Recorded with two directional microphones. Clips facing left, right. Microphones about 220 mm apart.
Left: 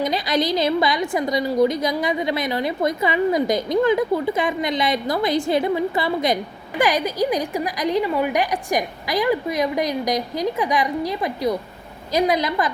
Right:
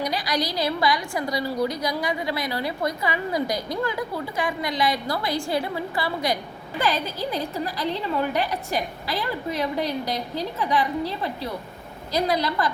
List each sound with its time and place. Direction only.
0.0 s a woman's voice: 20° left (ahead or behind)